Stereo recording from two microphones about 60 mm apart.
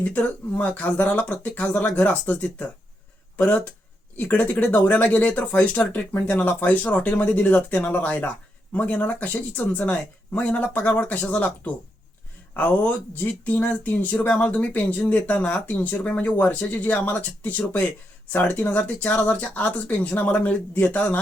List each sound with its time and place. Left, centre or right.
0.0 s speech: left